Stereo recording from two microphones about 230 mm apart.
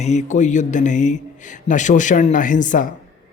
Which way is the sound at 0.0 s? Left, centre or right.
Left.